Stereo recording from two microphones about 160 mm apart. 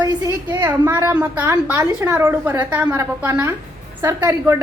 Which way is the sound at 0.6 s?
15° right (ahead or behind).